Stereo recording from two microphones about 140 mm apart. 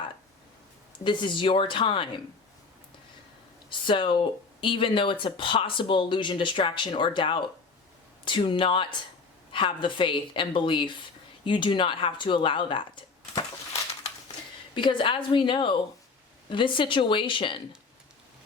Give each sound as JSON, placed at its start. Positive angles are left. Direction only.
{"t": 1.0, "sound": "speech", "side_deg": 35}
{"t": 3.7, "sound": "speech", "side_deg": 35}
{"t": 14.8, "sound": "speech", "side_deg": 35}